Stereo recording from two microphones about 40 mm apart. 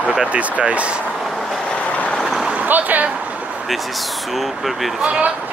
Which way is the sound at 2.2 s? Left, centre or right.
Centre.